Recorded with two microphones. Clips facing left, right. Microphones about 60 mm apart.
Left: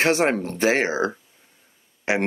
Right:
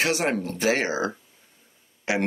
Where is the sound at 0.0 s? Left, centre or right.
Left.